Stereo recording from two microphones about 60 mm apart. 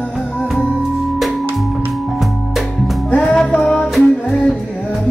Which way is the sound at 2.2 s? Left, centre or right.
Centre.